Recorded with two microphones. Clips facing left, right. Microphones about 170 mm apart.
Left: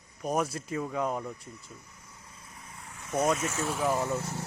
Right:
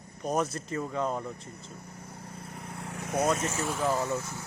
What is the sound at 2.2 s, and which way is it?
Vehicle, 65° right (ahead or behind).